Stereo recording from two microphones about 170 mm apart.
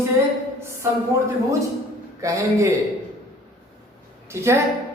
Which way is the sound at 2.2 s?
20° right (ahead or behind).